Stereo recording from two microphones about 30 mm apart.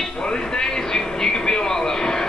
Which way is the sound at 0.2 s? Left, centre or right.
Left.